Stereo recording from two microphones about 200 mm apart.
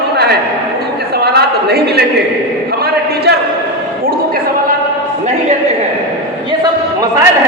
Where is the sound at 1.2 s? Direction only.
50° right (ahead or behind).